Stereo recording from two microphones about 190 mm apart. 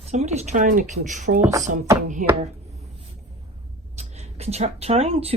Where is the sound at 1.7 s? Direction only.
45° right (ahead or behind).